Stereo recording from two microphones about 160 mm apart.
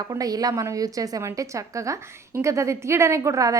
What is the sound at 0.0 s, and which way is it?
A woman's voice, 20° right (ahead or behind).